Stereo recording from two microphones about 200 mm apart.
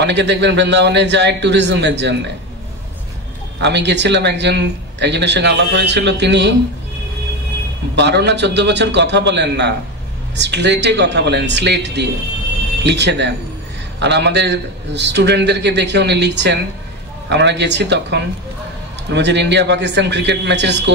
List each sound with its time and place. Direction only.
0.0 s a man's voice: 60° right (ahead or behind)
3.5 s a man's voice: 60° right (ahead or behind)
7.9 s a man's voice: 60° right (ahead or behind)